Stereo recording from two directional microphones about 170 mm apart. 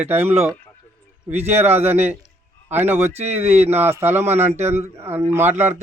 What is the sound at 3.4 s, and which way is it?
Speech, 40° right (ahead or behind).